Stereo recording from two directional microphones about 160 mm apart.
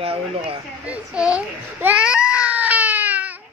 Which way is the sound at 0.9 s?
5° right (ahead or behind).